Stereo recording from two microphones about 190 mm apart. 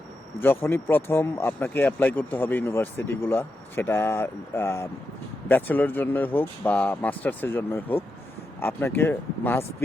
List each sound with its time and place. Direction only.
0.4 s speech: 10° left (ahead or behind)